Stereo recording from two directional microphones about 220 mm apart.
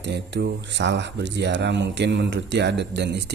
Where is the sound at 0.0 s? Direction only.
55° right (ahead or behind).